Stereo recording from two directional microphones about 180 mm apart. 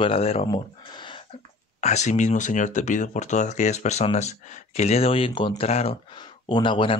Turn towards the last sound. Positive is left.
turn(degrees=30)  # may be behind; listen again after turning